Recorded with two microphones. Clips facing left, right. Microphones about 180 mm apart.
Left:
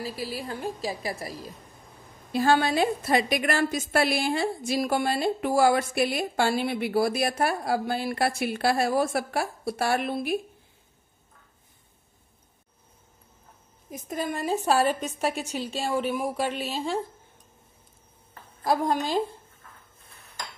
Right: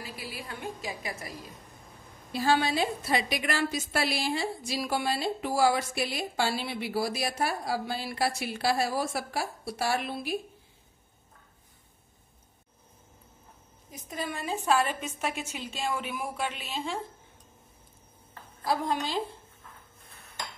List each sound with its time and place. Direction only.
0.0 s a woman's voice: 35° left (ahead or behind)
2.3 s a woman's voice: 55° left (ahead or behind)
13.8 s a woman's voice: 50° left (ahead or behind)
18.6 s a woman's voice: 45° left (ahead or behind)